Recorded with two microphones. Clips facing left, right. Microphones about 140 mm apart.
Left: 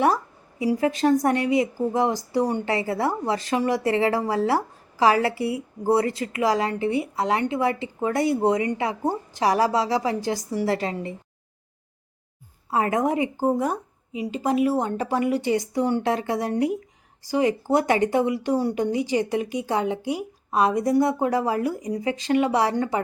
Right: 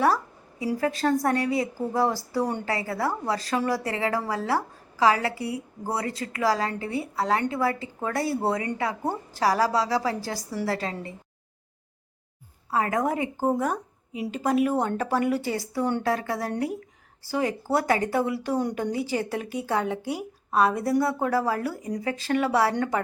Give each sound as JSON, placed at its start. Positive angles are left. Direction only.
{"t": 0.6, "sound": "speech", "side_deg": 15}
{"t": 12.7, "sound": "a woman's voice", "side_deg": 25}
{"t": 22.7, "sound": "speech", "side_deg": 5}